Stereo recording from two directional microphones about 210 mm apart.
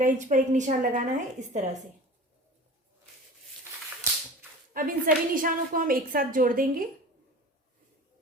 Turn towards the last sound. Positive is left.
turn(degrees=-40)  # may be behind; listen again after turning